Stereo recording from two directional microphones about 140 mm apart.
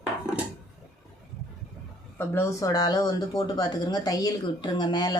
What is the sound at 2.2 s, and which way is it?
Speech, 20° left (ahead or behind).